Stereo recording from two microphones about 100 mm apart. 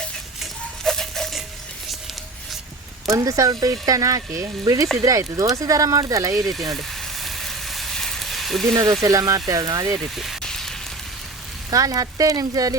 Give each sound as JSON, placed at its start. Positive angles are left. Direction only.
{"t": 0.9, "sound": "a sound", "side_deg": 5}
{"t": 3.1, "sound": "speech", "side_deg": -35}
{"t": 6.4, "sound": "speech", "side_deg": 0}
{"t": 6.7, "sound": "frying", "side_deg": 0}
{"t": 8.8, "sound": "speech", "side_deg": -35}
{"t": 10.0, "sound": "rain on surface", "side_deg": 0}
{"t": 11.7, "sound": "speech", "side_deg": -35}